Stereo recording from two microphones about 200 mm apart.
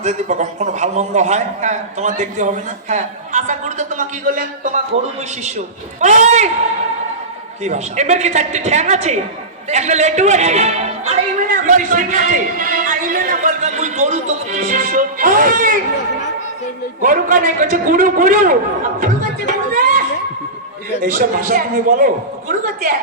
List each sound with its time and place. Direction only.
0.0 s a man's voice: 35° right (ahead or behind)
6.0 s a man's voice: 35° right (ahead or behind)
7.6 s a man's voice: 35° right (ahead or behind)
17.0 s a man's voice: 40° right (ahead or behind)
18.9 s music: 45° right (ahead or behind)
21.0 s a man's voice: 45° right (ahead or behind)